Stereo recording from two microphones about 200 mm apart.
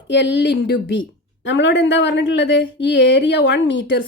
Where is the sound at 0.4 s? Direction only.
60° left (ahead or behind).